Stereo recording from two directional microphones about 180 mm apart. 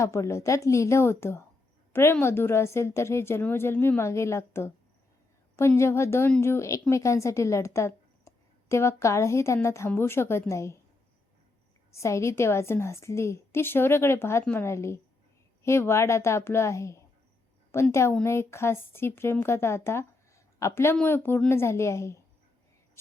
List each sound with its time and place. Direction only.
0.0 s a woman's voice: 15° left (ahead or behind)
11.9 s speech: 15° left (ahead or behind)